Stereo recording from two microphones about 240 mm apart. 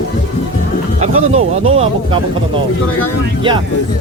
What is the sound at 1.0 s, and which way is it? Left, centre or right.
Speech, right.